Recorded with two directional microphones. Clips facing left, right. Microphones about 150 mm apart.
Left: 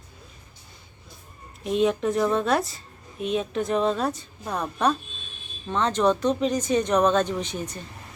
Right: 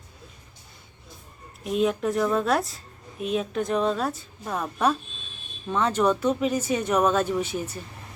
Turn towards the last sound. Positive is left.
turn(degrees=-10)  # may be behind; listen again after turning